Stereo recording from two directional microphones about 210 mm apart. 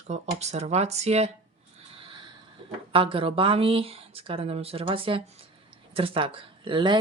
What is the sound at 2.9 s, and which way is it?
Speech, 25° right (ahead or behind).